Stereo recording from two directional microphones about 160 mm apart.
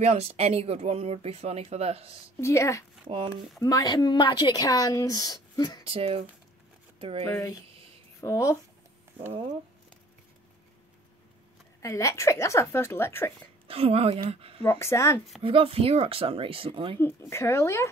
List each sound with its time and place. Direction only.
0.0 s speech: 40° right (ahead or behind)
2.4 s a woman's voice: 15° left (ahead or behind)
3.1 s speech: 35° right (ahead or behind)
3.6 s a woman's voice: 25° left (ahead or behind)
5.9 s speech: 35° right (ahead or behind)
7.2 s a woman's voice: 20° left (ahead or behind)
11.8 s a woman's voice: 20° left (ahead or behind)
13.7 s speech: 35° right (ahead or behind)
14.6 s a woman's voice: 15° left (ahead or behind)
15.4 s speech: 35° right (ahead or behind)
17.0 s a woman's voice: 15° left (ahead or behind)